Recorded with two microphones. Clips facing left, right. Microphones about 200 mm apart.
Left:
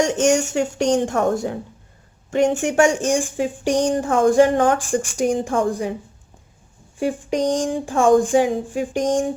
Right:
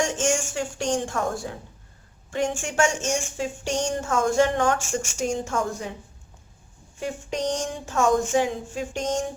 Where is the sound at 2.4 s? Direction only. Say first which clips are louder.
Left 9 dB; 65° left (ahead or behind).